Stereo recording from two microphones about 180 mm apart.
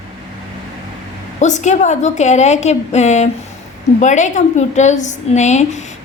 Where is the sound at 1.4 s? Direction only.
40° left (ahead or behind).